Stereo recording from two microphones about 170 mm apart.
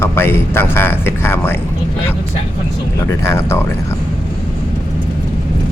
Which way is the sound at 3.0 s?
15° left (ahead or behind).